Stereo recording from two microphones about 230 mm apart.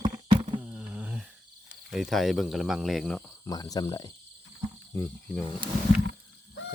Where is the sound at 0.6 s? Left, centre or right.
Centre.